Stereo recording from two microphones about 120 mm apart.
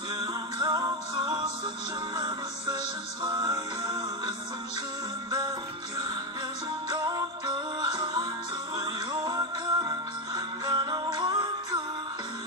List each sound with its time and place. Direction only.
0.2 s music: 35° right (ahead or behind)
6.9 s music: 30° right (ahead or behind)